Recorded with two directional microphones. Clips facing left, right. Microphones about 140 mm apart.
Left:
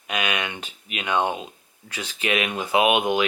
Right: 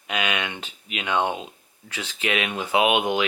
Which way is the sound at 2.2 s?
35° left (ahead or behind).